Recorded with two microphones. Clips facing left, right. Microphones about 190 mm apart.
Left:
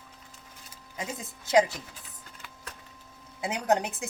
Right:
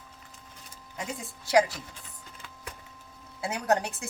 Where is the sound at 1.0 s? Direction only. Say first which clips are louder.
Even; 20° left (ahead or behind).